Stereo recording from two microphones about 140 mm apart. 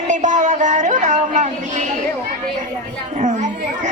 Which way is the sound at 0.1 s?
65° right (ahead or behind).